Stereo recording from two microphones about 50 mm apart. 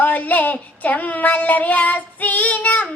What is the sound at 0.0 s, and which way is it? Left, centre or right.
Child singing, left.